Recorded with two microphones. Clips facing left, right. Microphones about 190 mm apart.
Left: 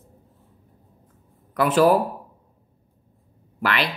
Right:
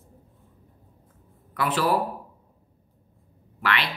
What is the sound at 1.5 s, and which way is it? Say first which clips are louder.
Speech: left 8 dB; 45° left (ahead or behind).